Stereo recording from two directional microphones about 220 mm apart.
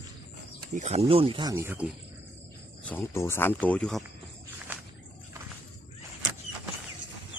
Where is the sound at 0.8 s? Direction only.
30° right (ahead or behind); by 1.9 s 10° right (ahead or behind).